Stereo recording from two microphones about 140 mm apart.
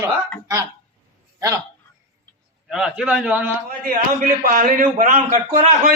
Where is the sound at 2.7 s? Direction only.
5° right (ahead or behind).